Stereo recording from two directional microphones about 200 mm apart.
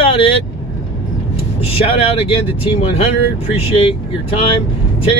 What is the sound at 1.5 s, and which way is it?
Speech, 30° left (ahead or behind).